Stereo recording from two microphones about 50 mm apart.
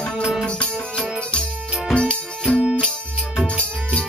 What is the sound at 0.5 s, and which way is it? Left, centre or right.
Music, centre.